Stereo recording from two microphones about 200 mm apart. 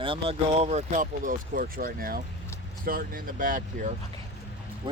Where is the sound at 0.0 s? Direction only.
25° right (ahead or behind); by 3.9 s 40° right (ahead or behind).